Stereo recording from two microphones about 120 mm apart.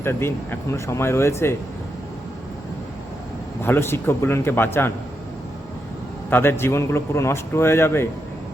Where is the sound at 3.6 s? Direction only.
20° left (ahead or behind).